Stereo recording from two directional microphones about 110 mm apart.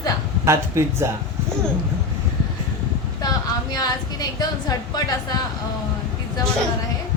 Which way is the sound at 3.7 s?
35° left (ahead or behind).